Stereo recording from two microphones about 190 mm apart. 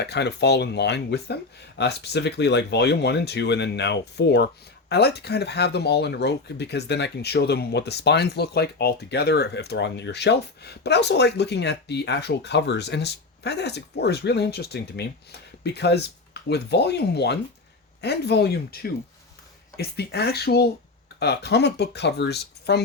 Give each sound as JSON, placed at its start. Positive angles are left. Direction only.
{"t": 0.0, "sound": "speech", "side_deg": 60}